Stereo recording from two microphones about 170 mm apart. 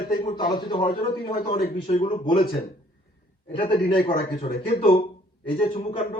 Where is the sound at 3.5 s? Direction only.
30° left (ahead or behind).